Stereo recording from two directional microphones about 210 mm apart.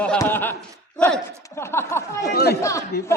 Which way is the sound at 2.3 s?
45° left (ahead or behind).